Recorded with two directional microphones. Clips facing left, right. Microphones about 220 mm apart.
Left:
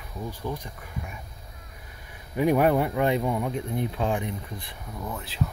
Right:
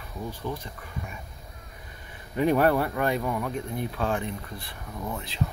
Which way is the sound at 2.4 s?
10° left (ahead or behind).